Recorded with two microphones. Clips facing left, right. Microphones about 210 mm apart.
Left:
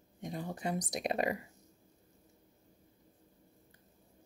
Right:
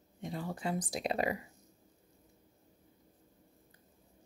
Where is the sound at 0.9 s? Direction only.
20° left (ahead or behind).